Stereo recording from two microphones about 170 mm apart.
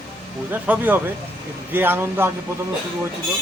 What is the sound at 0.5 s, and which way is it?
Speech, 10° right (ahead or behind).